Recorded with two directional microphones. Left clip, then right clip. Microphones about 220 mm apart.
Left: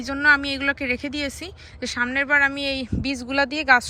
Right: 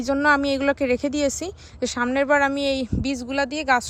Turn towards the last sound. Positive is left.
turn(degrees=-15)  # may be behind; listen again after turning